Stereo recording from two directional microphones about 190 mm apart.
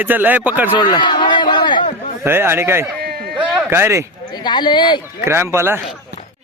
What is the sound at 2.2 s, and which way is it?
Speech, 10° right (ahead or behind).